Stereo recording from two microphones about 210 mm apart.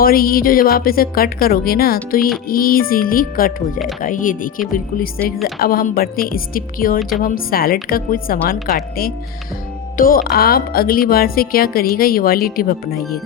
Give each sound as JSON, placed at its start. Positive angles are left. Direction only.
{"t": 0.0, "sound": "a woman's voice", "side_deg": 45}